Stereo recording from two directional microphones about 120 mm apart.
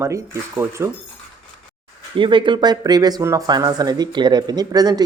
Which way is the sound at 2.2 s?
40° right (ahead or behind).